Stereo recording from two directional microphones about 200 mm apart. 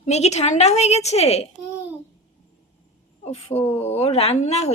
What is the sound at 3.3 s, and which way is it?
A woman's voice, 30° left (ahead or behind).